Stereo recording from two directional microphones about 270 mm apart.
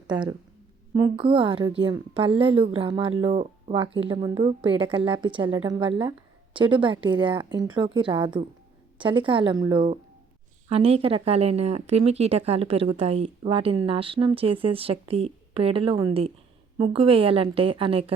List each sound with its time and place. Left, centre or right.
0.1 s a woman's voice: centre